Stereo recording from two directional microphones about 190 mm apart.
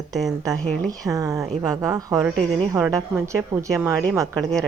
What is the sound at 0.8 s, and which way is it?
A woman's voice, 20° right (ahead or behind).